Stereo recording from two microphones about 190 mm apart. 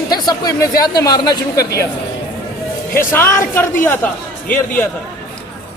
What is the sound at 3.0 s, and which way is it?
Speech, 15° left (ahead or behind).